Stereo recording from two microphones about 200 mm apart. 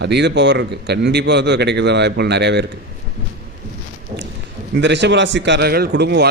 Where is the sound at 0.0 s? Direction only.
55° right (ahead or behind).